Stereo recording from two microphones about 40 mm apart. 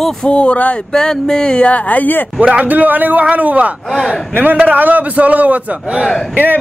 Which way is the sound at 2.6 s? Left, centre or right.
Right.